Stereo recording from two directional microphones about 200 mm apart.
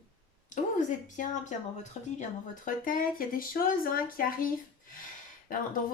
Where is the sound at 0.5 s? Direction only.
40° left (ahead or behind).